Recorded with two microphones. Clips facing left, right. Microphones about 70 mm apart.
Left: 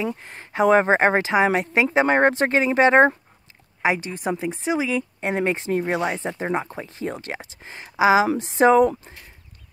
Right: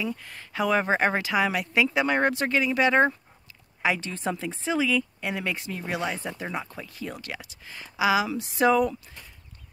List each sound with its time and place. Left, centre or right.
0.0 s speech: left
3.8 s a woman's voice: left